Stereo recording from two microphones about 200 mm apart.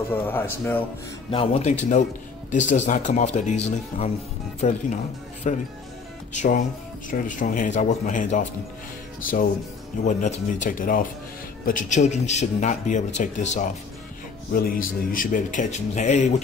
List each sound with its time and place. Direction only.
0.3 s speech: 10° left (ahead or behind)
1.3 s a man's voice: 30° left (ahead or behind)